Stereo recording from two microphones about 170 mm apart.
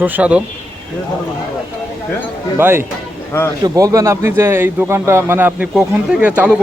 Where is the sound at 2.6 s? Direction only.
15° right (ahead or behind).